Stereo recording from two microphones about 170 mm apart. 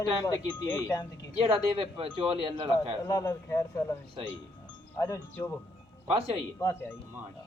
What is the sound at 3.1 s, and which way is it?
Speech, 20° left (ahead or behind).